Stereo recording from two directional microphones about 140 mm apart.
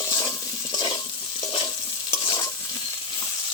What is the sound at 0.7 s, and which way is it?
Stir, 35° left (ahead or behind).